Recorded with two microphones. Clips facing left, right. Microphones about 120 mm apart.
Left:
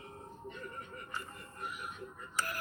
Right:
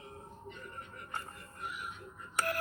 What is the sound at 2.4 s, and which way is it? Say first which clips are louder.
Telephone dialing: right 4 dB; 60° right (ahead or behind).